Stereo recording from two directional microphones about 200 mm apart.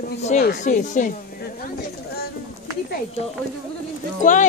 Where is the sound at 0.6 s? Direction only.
40° left (ahead or behind).